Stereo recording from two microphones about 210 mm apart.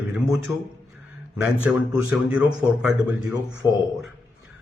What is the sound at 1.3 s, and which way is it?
Speech, 5° right (ahead or behind).